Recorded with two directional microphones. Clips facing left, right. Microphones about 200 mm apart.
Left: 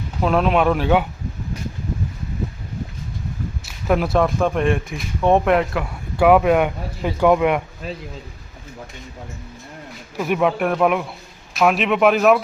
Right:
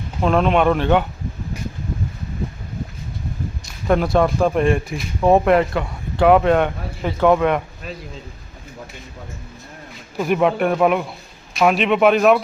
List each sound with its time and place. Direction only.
0.2 s speech: 5° left (ahead or behind)
3.7 s speech: 5° left (ahead or behind)
10.2 s speech: centre (ahead or behind)